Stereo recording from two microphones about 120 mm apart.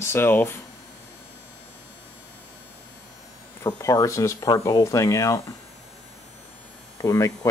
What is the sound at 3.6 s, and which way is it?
Speech, 25° left (ahead or behind).